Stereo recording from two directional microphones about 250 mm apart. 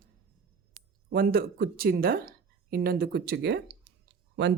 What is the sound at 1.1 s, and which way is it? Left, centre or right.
Speech, right.